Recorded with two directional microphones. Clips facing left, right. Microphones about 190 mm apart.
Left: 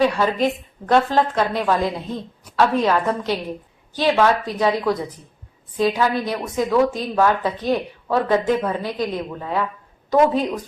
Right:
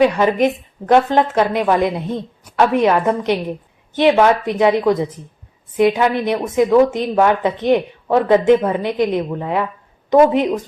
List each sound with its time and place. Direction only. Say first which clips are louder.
0.0 s a woman's voice: right 4 dB; 20° right (ahead or behind)